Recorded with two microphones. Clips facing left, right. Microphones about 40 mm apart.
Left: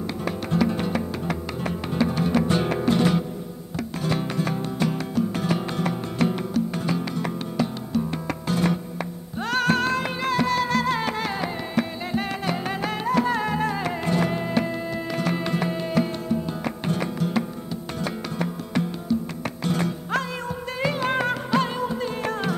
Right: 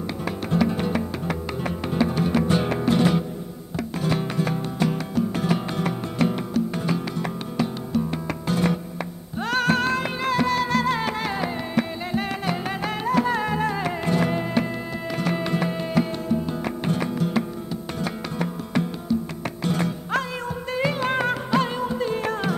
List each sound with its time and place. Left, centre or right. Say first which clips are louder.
0.2 s music: right 1 dB; centre
19.8 s music: right 1 dB; centre